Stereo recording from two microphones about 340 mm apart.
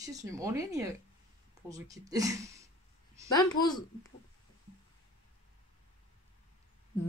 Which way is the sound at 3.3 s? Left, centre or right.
Centre.